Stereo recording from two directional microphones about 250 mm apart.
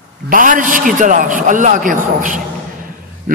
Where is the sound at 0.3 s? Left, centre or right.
Right.